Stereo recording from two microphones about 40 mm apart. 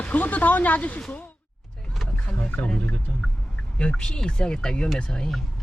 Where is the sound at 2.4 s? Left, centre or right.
Left.